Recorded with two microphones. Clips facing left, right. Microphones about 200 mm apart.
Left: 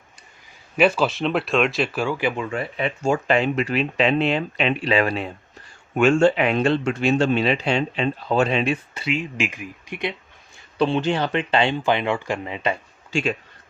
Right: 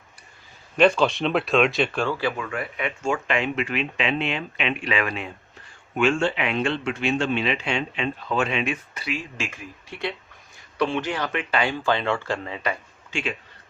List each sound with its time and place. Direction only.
0.8 s speech: 5° left (ahead or behind)
10.8 s speech: 25° left (ahead or behind)
13.1 s speech: 40° left (ahead or behind)